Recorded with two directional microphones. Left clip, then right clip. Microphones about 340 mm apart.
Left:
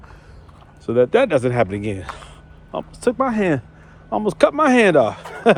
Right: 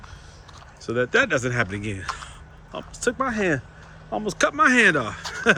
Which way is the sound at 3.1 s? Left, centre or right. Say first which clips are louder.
Left 3 dB; centre.